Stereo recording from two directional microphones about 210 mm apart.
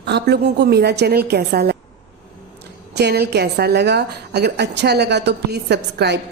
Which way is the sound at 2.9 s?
50° right (ahead or behind).